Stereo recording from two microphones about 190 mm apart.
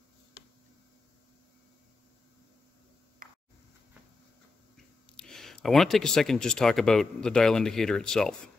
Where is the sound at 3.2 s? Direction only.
45° right (ahead or behind).